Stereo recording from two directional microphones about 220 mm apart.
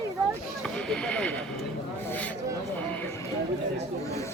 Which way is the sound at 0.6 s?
5° left (ahead or behind).